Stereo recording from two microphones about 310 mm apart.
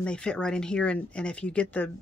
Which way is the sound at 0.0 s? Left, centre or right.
Centre.